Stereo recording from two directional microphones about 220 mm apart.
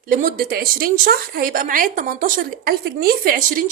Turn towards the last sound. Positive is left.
turn(degrees=-40)  # may be behind; listen again after turning